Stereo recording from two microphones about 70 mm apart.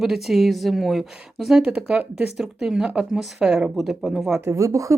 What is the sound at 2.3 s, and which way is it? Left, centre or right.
Speech, centre.